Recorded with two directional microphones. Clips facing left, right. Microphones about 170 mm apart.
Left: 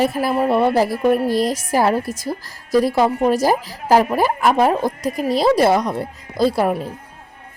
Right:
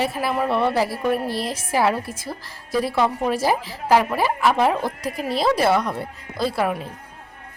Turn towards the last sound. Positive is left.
turn(degrees=40)  # may be behind; listen again after turning